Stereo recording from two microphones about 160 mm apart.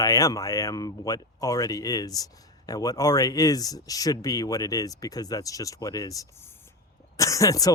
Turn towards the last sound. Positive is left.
turn(degrees=20)  # may be behind; listen again after turning